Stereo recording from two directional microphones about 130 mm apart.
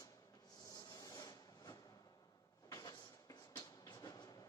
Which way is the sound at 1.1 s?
30° left (ahead or behind).